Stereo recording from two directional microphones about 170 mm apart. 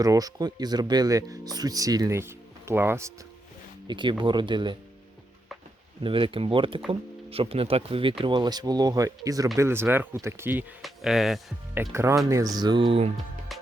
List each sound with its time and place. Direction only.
0.0 s speech: 20° right (ahead or behind)
3.8 s speech: 25° right (ahead or behind)
6.0 s speech: 30° right (ahead or behind); by 10.7 s 10° right (ahead or behind)
10.8 s speech: centre (ahead or behind)
11.7 s speech: 15° right (ahead or behind); by 13.1 s 30° right (ahead or behind)
13.5 s music: centre (ahead or behind)